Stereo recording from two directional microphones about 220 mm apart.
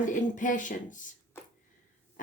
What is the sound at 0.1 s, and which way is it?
Speech, 35° left (ahead or behind).